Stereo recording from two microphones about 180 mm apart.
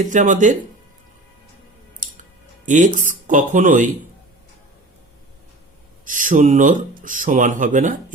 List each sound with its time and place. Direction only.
0.0 s speech: 45° right (ahead or behind)
2.6 s speech: 45° right (ahead or behind)
6.1 s speech: 45° right (ahead or behind)